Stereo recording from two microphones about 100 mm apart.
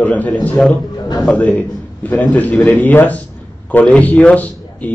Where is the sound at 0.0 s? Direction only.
15° left (ahead or behind).